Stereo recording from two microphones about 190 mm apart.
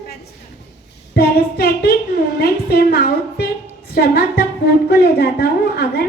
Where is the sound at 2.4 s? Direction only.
55° left (ahead or behind).